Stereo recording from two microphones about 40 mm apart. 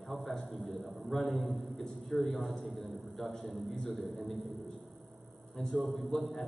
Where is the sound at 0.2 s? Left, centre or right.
Centre.